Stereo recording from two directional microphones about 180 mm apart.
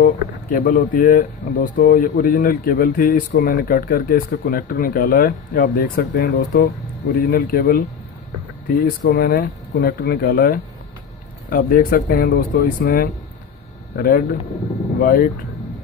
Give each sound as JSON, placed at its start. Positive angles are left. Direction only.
{"t": 0.0, "sound": "speech", "side_deg": 50}
{"t": 8.8, "sound": "speech", "side_deg": 55}